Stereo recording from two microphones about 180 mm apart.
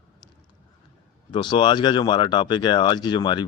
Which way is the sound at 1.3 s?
25° left (ahead or behind).